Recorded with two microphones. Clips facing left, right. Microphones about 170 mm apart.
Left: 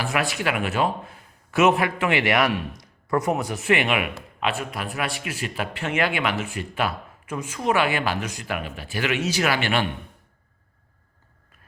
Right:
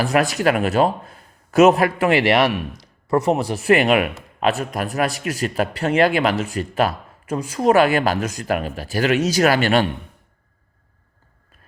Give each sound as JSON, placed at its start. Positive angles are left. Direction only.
{"t": 0.0, "sound": "a man's voice", "side_deg": -40}